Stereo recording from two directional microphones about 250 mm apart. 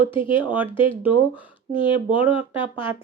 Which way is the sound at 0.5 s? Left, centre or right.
Centre.